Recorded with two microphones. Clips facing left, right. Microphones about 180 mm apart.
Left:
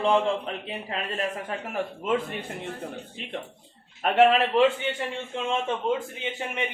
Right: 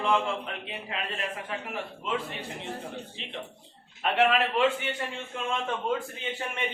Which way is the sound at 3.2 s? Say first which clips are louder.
Left 4 dB; 50° left (ahead or behind).